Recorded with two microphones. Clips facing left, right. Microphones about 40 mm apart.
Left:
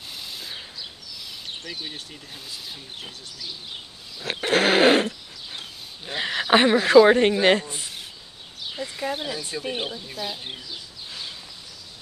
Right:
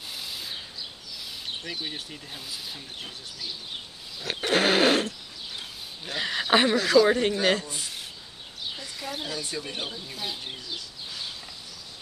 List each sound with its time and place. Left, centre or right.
1.6 s speech: centre
4.5 s a sound: centre
6.0 s speech: centre